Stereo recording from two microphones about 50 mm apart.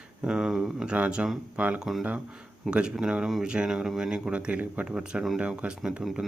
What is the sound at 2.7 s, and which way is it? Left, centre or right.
Speech, centre.